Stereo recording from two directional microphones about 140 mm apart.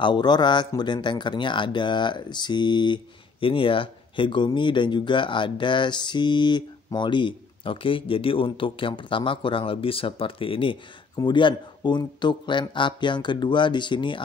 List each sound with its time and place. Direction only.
0.0 s speech: 35° left (ahead or behind)